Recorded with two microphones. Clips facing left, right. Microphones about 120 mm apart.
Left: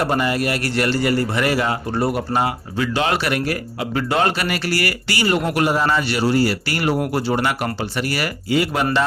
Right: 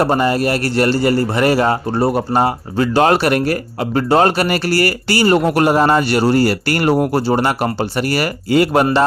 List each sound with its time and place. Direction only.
0.0 s a man's voice: 35° right (ahead or behind)